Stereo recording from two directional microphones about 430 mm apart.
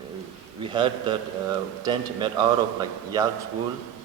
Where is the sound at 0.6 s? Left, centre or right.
Centre.